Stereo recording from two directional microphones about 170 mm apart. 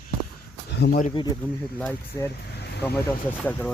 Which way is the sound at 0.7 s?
80° left.